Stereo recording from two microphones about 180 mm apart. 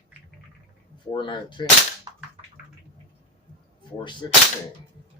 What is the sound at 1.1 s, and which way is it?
Speech, 25° left (ahead or behind).